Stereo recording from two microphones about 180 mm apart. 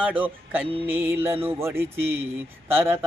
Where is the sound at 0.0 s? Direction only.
10° right (ahead or behind).